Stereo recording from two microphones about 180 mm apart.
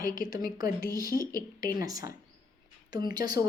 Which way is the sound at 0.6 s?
55° left (ahead or behind).